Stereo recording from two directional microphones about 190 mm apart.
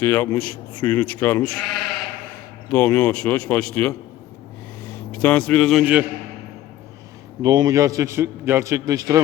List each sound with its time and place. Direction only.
0.0 s speech: 15° left (ahead or behind)
2.6 s speech: 10° left (ahead or behind)
5.2 s a man's voice: 5° left (ahead or behind)
7.4 s a man's voice: 20° right (ahead or behind)